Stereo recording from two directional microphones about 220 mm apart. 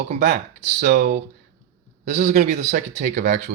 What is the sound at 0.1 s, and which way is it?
Speech, 35° right (ahead or behind).